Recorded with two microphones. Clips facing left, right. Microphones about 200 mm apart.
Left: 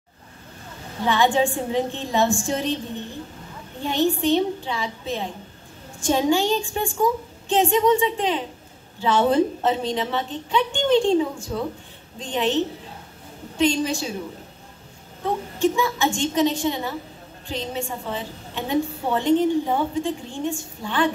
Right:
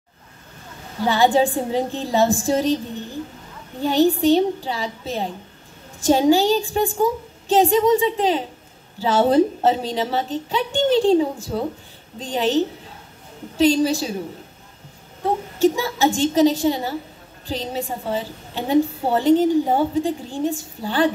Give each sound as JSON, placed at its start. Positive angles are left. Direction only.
{"t": 1.0, "sound": "a woman's voice", "side_deg": -35}
{"t": 3.8, "sound": "a woman's voice", "side_deg": -35}
{"t": 15.2, "sound": "a woman's voice", "side_deg": -35}